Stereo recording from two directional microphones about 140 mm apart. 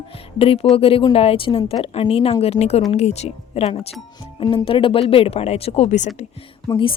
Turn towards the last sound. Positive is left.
turn(degrees=35)  # may be behind; listen again after turning